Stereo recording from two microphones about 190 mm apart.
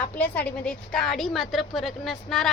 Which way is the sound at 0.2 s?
5° left (ahead or behind).